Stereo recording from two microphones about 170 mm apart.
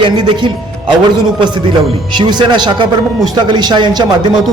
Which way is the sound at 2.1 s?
25° right (ahead or behind).